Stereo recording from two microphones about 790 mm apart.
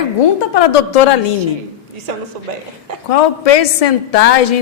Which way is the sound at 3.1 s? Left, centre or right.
Left.